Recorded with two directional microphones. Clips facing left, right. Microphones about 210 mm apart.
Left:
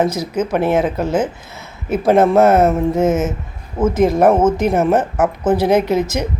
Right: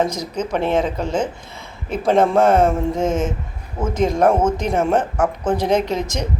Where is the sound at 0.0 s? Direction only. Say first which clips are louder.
Left 4 dB; 5° left (ahead or behind).